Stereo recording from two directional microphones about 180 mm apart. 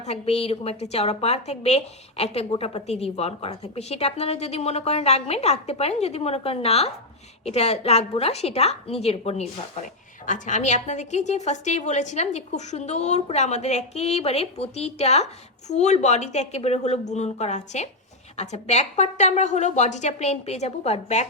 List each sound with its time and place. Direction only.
0.0 s a woman's voice: 35° left (ahead or behind)